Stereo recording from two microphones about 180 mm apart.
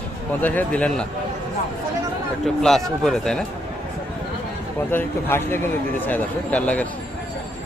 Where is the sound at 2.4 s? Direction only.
Centre (ahead or behind).